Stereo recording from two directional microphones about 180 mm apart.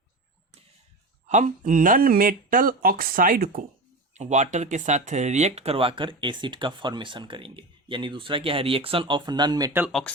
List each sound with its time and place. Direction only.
1.3 s speech: 40° right (ahead or behind)
4.1 s speech: 40° right (ahead or behind); by 9.8 s 20° right (ahead or behind)